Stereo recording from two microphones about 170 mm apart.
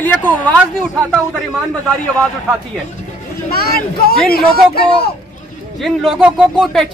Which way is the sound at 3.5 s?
60° left (ahead or behind).